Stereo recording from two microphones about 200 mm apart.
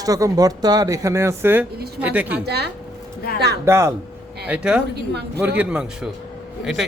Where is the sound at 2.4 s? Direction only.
55° right (ahead or behind).